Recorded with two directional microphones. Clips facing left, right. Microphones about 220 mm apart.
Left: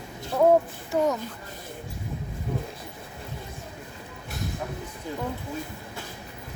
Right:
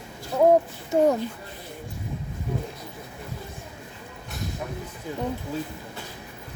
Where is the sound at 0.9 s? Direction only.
25° right (ahead or behind).